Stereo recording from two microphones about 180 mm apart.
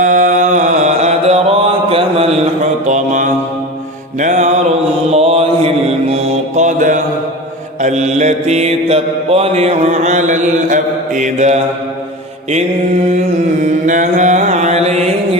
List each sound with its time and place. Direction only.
0.0 s mantra: 45° right (ahead or behind)
13.8 s mantra: 45° right (ahead or behind)